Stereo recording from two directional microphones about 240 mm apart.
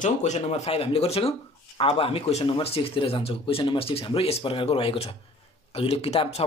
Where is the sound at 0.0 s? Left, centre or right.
Left.